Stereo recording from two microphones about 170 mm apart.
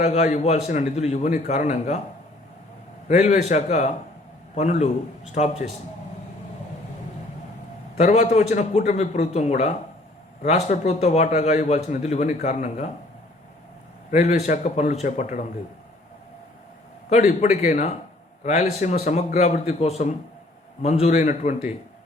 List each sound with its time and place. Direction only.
0.0 s a man's voice: 40° left (ahead or behind)
3.1 s a man's voice: 45° left (ahead or behind)
7.9 s a man's voice: 40° left (ahead or behind)
14.1 s a man's voice: 45° left (ahead or behind)
17.1 s a man's voice: 40° left (ahead or behind)